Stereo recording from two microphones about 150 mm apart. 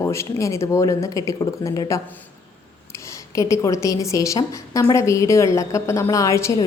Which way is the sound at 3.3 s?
20° left (ahead or behind).